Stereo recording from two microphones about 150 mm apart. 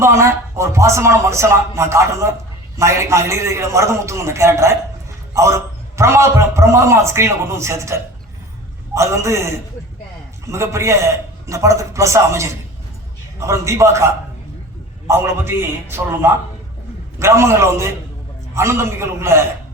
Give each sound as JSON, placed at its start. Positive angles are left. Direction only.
{"t": 0.0, "sound": "a man's voice", "side_deg": -20}
{"t": 9.0, "sound": "a man's voice", "side_deg": -20}